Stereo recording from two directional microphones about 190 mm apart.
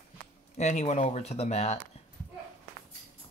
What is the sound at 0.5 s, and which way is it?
Speech, 35° left (ahead or behind).